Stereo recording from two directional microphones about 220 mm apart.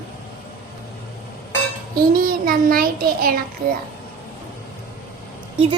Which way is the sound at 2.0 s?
40° right (ahead or behind).